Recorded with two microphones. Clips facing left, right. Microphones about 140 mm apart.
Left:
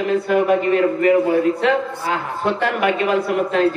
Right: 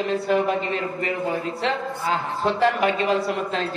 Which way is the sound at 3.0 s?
55° left (ahead or behind).